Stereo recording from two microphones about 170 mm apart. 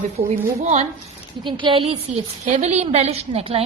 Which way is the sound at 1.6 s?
30° right (ahead or behind).